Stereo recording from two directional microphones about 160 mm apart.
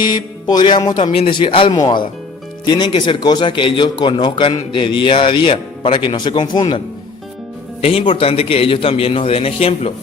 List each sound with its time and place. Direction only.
0.0 s a man's voice: 25° left (ahead or behind)